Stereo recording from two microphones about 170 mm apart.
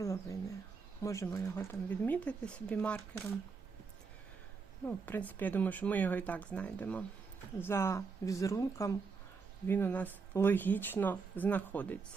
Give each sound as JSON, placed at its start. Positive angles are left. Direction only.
{"t": 0.0, "sound": "a sound", "side_deg": 15}
{"t": 1.0, "sound": "speech", "side_deg": 15}
{"t": 4.9, "sound": "speech", "side_deg": 10}